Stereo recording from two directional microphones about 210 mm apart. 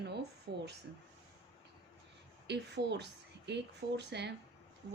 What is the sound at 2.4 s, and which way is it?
Speech, 55° right (ahead or behind).